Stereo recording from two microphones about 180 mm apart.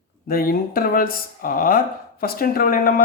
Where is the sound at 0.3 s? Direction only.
55° left (ahead or behind).